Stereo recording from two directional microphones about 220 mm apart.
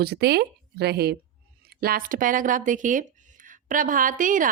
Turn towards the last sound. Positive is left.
turn(degrees=-35)  # may be behind; listen again after turning